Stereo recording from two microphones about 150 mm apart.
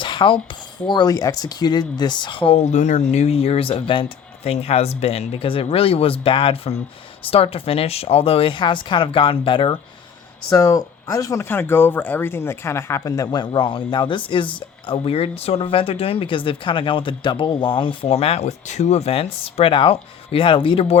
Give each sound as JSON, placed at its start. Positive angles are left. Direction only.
{"t": 0.0, "sound": "a sound", "side_deg": 35}
{"t": 0.9, "sound": "speech", "side_deg": 30}
{"t": 10.5, "sound": "speech", "side_deg": 20}